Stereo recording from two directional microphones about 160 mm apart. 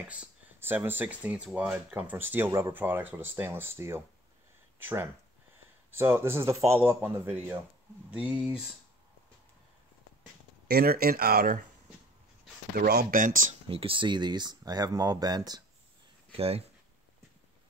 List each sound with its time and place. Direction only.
0.1 s speech: 10° right (ahead or behind)
10.7 s speech: 70° right (ahead or behind)
12.7 s speech: 70° right (ahead or behind)
13.7 s speech: 35° right (ahead or behind)
16.3 s speech: 40° right (ahead or behind)